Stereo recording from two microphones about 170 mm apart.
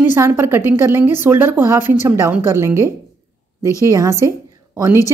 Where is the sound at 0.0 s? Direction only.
10° right (ahead or behind).